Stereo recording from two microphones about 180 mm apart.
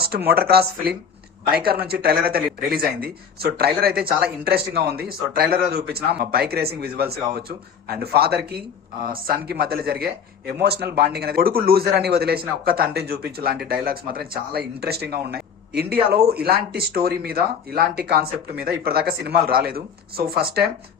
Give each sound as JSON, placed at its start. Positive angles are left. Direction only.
{"t": 0.3, "sound": "speech", "side_deg": -60}